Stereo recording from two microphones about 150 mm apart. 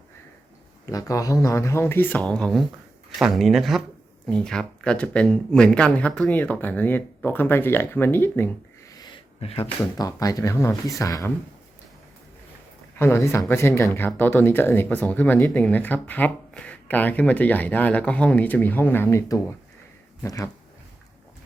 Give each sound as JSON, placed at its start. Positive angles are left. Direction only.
{"t": 0.9, "sound": "speech", "side_deg": 25}
{"t": 8.9, "sound": "a sound", "side_deg": 30}
{"t": 10.0, "sound": "speech", "side_deg": 25}
{"t": 13.0, "sound": "speech", "side_deg": 15}